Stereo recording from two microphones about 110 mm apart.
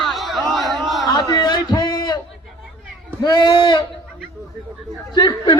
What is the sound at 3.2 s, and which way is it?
Speech, 45° left (ahead or behind).